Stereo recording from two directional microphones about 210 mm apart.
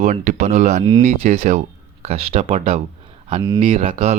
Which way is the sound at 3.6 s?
40° right (ahead or behind).